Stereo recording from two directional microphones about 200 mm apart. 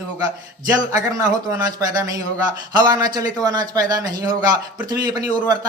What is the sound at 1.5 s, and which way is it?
Speech, 15° right (ahead or behind).